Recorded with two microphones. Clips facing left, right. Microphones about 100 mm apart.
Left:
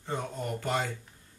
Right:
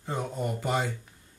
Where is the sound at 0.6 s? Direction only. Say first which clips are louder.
Right 2 dB; 5° right (ahead or behind).